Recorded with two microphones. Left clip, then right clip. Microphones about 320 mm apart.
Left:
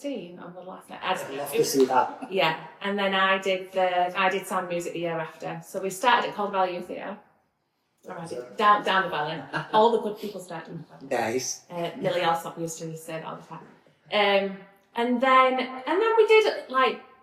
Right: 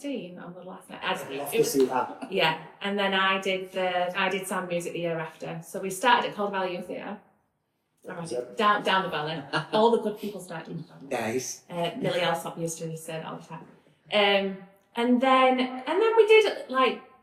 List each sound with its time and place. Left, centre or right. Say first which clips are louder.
0.9 s speech: left 2 dB; centre
8.5 s speech: left 3 dB; centre
11.1 s speech: left 3 dB; centre
11.7 s speech: even; centre